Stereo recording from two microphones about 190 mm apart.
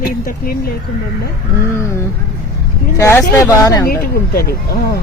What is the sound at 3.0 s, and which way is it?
Speech, 15° left (ahead or behind).